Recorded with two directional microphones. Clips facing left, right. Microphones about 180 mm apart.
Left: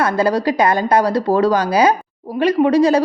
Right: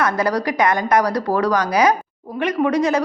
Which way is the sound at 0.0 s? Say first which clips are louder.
Left 3 dB; 30° left (ahead or behind).